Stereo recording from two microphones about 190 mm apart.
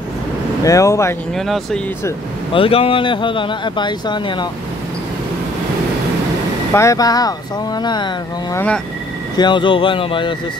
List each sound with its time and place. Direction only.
0.7 s speech: 15° left (ahead or behind)
1.3 s speech: centre (ahead or behind)
2.5 s speech: 30° left (ahead or behind)
6.7 s speech: 15° left (ahead or behind)
8.5 s speech: 5° left (ahead or behind)
9.4 s speech: 25° left (ahead or behind)